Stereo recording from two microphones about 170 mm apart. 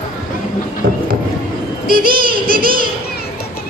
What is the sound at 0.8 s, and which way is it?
Speech, 60° right (ahead or behind).